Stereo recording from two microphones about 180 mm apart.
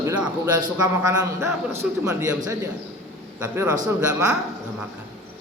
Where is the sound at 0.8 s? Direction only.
20° right (ahead or behind).